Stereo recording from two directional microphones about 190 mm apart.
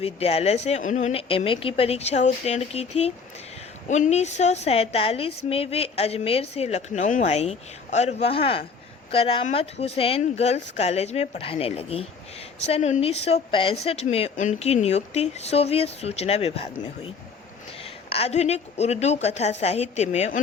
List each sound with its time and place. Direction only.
0.0 s a woman's voice: 30° left (ahead or behind)
18.1 s a woman's voice: 35° left (ahead or behind)